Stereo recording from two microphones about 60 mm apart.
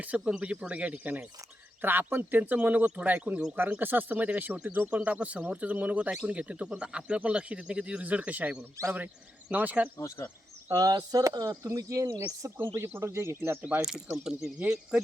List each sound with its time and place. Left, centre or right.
0.0 s speech: right
2.4 s speech: right
4.9 s speech: right
10.7 s speech: right
12.5 s speech: right
13.8 s speech: centre